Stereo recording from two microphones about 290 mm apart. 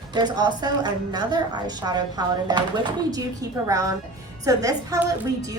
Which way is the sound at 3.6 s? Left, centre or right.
Centre.